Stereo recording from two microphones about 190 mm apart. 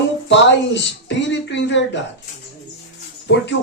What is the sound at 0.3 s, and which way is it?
Speech, 70° left (ahead or behind).